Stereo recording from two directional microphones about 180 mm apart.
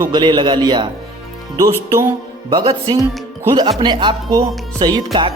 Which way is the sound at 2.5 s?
25° right (ahead or behind).